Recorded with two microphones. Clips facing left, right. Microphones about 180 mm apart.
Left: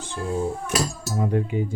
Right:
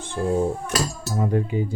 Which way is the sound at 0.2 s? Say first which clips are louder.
Right 4 dB; 40° right (ahead or behind).